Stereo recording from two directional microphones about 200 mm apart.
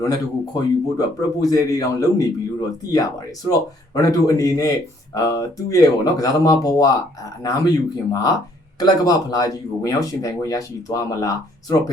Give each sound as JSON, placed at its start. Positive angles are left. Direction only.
{"t": 0.0, "sound": "a man's voice", "side_deg": 20}